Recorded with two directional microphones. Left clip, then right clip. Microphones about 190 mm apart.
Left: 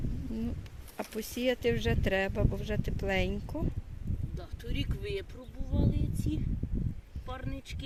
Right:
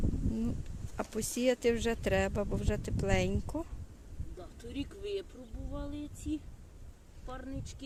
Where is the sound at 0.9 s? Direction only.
5° right (ahead or behind).